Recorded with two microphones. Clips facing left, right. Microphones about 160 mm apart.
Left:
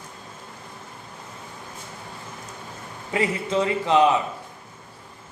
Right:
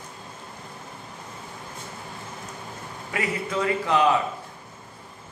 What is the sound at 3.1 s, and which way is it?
A man's voice, 25° left (ahead or behind).